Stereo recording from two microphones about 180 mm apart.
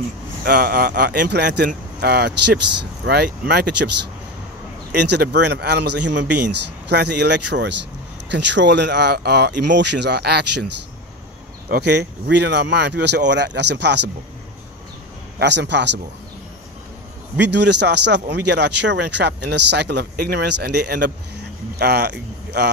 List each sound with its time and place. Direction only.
0.5 s speech: 55° right (ahead or behind)
4.9 s speech: 65° right (ahead or behind)
11.7 s speech: 65° right (ahead or behind)
15.3 s speech: 75° right (ahead or behind)
17.4 s speech: 75° right (ahead or behind)